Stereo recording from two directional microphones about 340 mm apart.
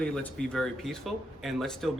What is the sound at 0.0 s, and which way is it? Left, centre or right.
Speech, centre.